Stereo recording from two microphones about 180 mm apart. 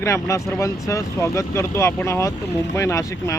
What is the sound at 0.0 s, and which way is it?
Speech, 15° left (ahead or behind).